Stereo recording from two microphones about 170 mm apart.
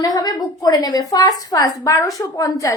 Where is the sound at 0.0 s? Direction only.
20° left (ahead or behind).